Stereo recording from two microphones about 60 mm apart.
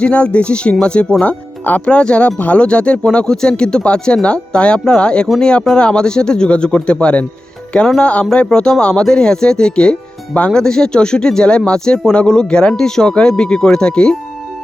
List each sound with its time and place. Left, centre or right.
0.0 s speech: centre